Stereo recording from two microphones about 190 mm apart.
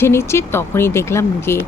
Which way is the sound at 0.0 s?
15° left (ahead or behind).